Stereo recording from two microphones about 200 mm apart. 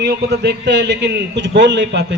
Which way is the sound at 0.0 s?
55° right (ahead or behind).